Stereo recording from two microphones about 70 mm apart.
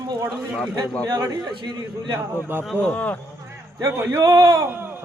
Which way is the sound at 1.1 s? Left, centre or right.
Right.